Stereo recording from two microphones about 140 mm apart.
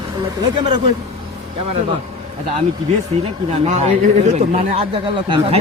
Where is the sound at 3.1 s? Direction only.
45° right (ahead or behind).